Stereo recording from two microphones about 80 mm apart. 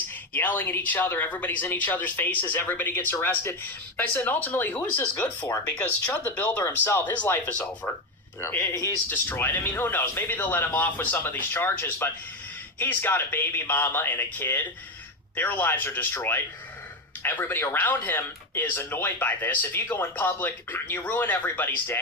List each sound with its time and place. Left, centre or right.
0.1 s speech: left
8.7 s speech: left
9.0 s speech: left